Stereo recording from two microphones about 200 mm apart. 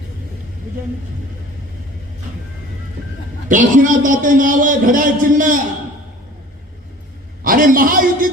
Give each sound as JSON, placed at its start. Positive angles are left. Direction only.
{"t": 3.5, "sound": "a man's voice", "side_deg": -40}
{"t": 7.4, "sound": "a man's voice", "side_deg": -45}